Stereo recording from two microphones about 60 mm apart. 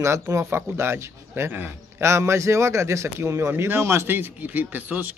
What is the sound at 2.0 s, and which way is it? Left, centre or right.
Speech, right.